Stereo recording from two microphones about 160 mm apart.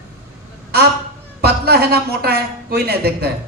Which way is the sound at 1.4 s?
75° right (ahead or behind).